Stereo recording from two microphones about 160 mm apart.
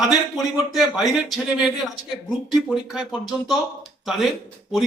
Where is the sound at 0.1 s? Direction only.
5° right (ahead or behind).